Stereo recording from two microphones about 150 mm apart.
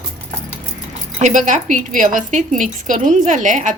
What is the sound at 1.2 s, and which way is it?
Speech, 55° right (ahead or behind).